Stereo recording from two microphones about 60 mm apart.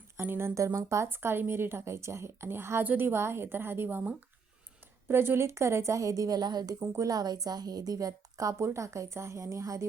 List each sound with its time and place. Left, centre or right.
0.2 s a woman's voice: right
0.5 s a woman's voice: right
1.0 s a woman's voice: right
5.0 s a woman's voice: right
6.7 s a woman's voice: right
7.0 s a woman's voice: right
8.5 s a woman's voice: right